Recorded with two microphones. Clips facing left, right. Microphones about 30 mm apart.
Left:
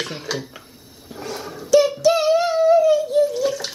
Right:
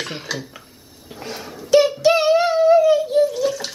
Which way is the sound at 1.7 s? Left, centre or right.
Right.